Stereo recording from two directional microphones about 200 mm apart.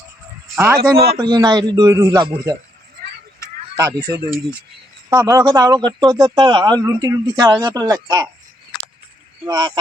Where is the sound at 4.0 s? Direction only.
50° right (ahead or behind).